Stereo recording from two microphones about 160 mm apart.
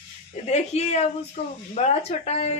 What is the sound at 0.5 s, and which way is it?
Speech, 45° left (ahead or behind).